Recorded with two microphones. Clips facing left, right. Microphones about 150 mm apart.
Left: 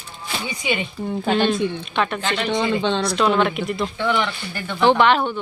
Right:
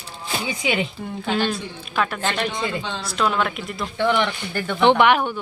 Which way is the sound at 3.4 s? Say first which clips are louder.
Left 4 dB; centre (ahead or behind).